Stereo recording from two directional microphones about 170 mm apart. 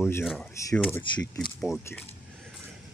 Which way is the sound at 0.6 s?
10° left (ahead or behind).